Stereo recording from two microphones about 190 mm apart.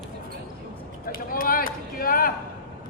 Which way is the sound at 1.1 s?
50° left (ahead or behind).